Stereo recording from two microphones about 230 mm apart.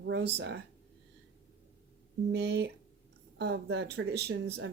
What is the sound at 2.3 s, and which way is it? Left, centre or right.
Speech, right.